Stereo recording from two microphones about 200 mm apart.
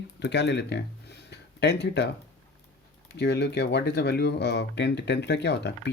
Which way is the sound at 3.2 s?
55° left (ahead or behind).